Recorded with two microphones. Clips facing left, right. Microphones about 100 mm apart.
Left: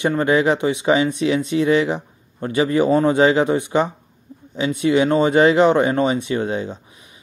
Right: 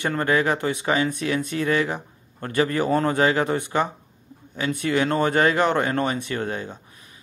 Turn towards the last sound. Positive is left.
turn(degrees=20)  # may be behind; listen again after turning